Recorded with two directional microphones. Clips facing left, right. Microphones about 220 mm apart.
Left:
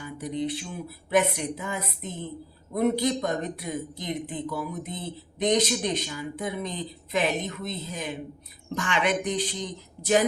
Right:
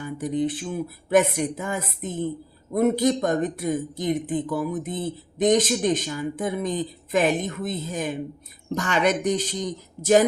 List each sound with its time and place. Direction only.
0.0 s a man's voice: 50° right (ahead or behind)